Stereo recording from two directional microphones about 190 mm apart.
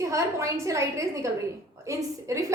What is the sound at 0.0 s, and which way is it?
A woman's voice, 15° right (ahead or behind).